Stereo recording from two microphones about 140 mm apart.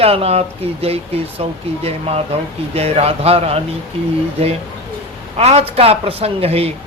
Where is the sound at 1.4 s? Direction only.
45° right (ahead or behind).